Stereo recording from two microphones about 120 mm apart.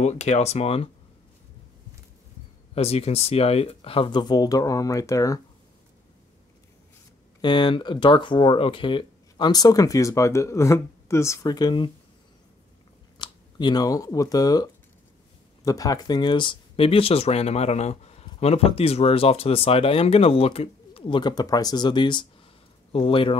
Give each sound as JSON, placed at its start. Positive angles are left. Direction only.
{"t": 0.0, "sound": "speech", "side_deg": 65}
{"t": 2.7, "sound": "speech", "side_deg": 55}
{"t": 7.4, "sound": "speech", "side_deg": 40}
{"t": 13.2, "sound": "speech", "side_deg": 40}